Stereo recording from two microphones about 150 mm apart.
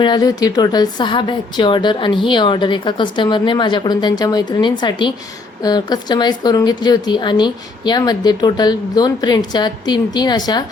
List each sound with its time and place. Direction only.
0.0 s a woman's voice: 25° left (ahead or behind)